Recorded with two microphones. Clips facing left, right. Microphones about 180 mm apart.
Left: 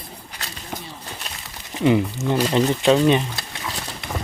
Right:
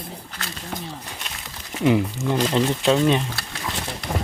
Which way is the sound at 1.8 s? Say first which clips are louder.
Left 1 dB; centre (ahead or behind).